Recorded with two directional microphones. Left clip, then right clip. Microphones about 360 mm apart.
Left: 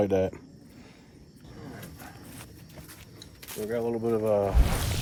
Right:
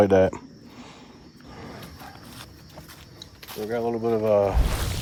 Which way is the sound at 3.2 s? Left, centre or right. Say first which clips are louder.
Right 3 dB; centre.